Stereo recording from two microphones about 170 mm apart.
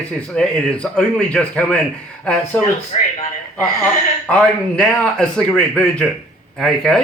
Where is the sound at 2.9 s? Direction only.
40° left (ahead or behind).